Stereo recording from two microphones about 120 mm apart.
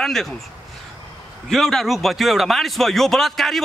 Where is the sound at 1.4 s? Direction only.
Centre (ahead or behind).